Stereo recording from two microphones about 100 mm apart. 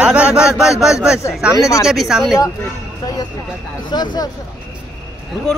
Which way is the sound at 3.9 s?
45° left (ahead or behind).